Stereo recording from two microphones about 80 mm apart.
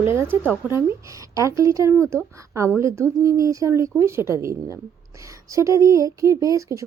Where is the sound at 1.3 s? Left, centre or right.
Right.